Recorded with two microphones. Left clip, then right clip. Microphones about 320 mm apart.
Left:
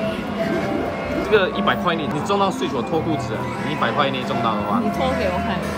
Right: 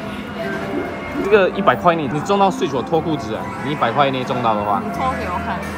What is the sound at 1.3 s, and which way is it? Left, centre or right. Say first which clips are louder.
Speech: right 4 dB; right.